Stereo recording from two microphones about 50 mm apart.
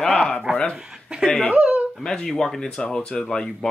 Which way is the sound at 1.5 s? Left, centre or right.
Right.